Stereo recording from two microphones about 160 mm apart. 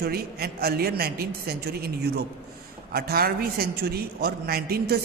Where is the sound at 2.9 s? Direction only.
75° right (ahead or behind).